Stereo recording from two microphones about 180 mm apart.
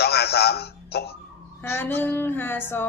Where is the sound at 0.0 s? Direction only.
65° left (ahead or behind).